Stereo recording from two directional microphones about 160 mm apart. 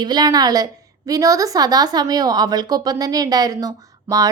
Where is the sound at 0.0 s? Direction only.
25° right (ahead or behind).